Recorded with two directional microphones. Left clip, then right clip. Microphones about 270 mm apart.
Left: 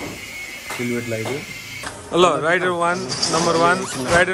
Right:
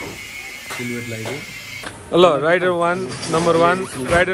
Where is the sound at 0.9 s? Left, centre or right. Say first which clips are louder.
Left 3 dB; centre.